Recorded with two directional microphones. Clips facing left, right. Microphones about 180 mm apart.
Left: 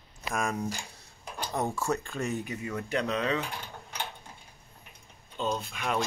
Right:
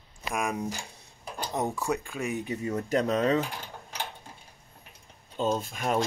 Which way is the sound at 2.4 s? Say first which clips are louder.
Right 4 dB; 30° right (ahead or behind).